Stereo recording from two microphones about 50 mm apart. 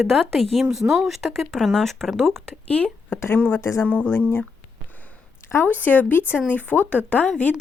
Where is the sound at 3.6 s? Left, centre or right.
Left.